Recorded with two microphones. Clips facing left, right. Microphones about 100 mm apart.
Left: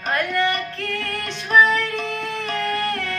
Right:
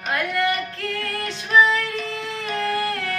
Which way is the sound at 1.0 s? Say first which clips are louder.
Even; 15° right (ahead or behind).